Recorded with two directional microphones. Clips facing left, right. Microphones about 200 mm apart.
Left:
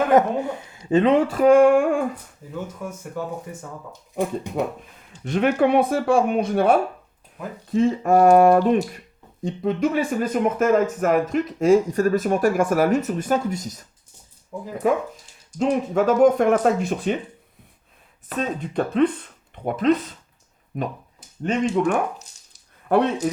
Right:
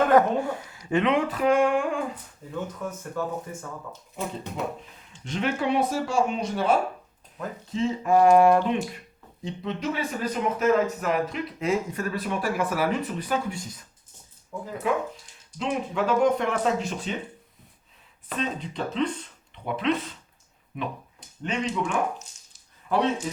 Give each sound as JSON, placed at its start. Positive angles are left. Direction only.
{"t": 0.1, "sound": "speech", "side_deg": 20}
{"t": 1.3, "sound": "speech", "side_deg": 45}
{"t": 2.5, "sound": "speech", "side_deg": 10}
{"t": 5.2, "sound": "speech", "side_deg": 55}
{"t": 14.5, "sound": "speech", "side_deg": 15}
{"t": 14.8, "sound": "speech", "side_deg": 45}
{"t": 18.3, "sound": "speech", "side_deg": 55}